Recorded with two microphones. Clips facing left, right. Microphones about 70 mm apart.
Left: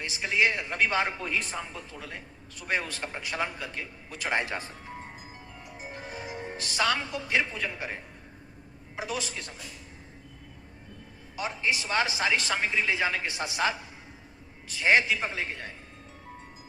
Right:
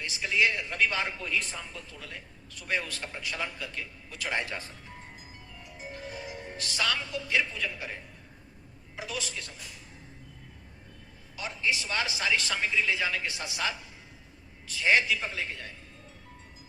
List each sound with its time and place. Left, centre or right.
0.0 s a man's voice: left
11.3 s a man's voice: left